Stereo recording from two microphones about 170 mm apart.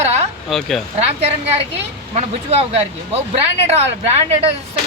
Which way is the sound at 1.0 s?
35° right (ahead or behind).